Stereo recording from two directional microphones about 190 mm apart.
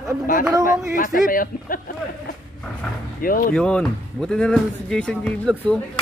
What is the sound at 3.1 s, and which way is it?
Speech, 50° left (ahead or behind).